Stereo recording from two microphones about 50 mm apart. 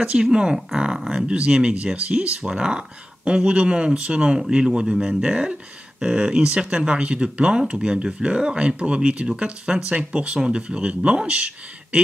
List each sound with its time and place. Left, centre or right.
0.0 s speech: centre